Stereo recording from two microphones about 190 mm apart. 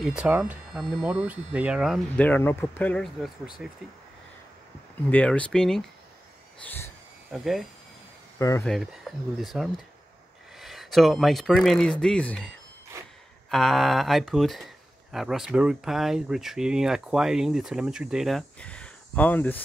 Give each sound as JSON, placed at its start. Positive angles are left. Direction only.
{"t": 0.0, "sound": "speech", "side_deg": -5}
{"t": 2.1, "sound": "speech", "side_deg": 10}
{"t": 5.1, "sound": "speech", "side_deg": 5}
{"t": 7.2, "sound": "speech", "side_deg": 0}
{"t": 8.4, "sound": "speech", "side_deg": 15}
{"t": 8.6, "sound": "speech", "side_deg": 0}